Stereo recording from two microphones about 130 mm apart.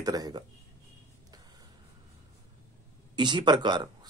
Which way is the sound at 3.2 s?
35° right (ahead or behind).